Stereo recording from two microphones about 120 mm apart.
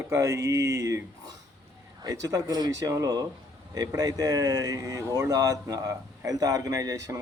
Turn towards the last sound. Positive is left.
turn(degrees=-25)  # may be behind; listen again after turning